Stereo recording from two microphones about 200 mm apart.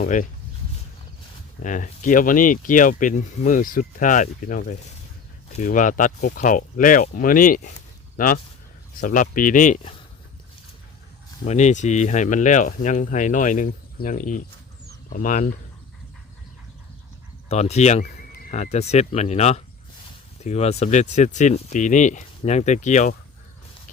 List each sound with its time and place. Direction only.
0.0 s speech: 40° left (ahead or behind)
1.6 s speech: 40° left (ahead or behind)
11.4 s speech: 35° left (ahead or behind)
17.5 s speech: 35° left (ahead or behind)